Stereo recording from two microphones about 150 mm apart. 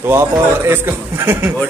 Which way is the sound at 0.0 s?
15° right (ahead or behind).